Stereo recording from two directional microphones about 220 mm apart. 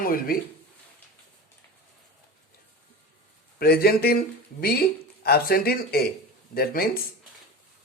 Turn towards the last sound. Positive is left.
turn(degrees=45)  # may be behind; listen again after turning